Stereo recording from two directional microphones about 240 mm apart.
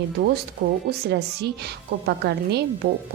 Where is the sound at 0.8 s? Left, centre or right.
Right.